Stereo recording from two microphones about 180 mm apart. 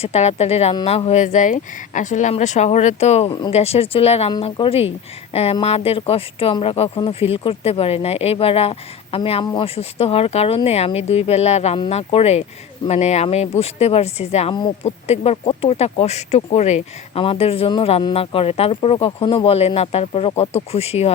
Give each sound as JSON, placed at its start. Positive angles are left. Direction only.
{"t": 0.0, "sound": "speech", "side_deg": 35}